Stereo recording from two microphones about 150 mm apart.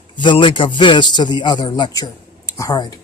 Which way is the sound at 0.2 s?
35° left (ahead or behind).